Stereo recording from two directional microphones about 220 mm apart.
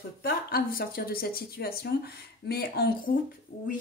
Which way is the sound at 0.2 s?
40° left (ahead or behind).